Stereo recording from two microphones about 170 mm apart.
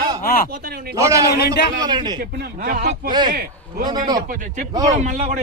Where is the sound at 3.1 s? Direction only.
25° right (ahead or behind).